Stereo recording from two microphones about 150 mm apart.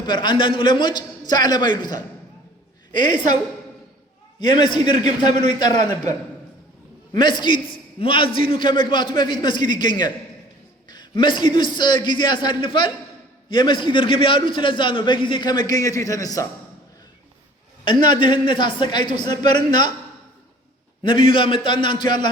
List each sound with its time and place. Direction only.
0.0 s a man's voice: 30° left (ahead or behind)
4.4 s a man's voice: 30° left (ahead or behind)
7.2 s a man's voice: 30° left (ahead or behind)
17.8 s a man's voice: 30° left (ahead or behind)
21.0 s a man's voice: 35° left (ahead or behind)